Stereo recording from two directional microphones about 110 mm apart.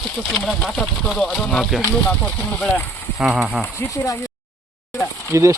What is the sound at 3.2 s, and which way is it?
Speech, 5° right (ahead or behind).